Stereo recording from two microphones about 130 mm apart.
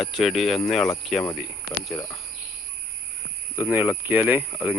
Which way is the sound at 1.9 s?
25° left (ahead or behind).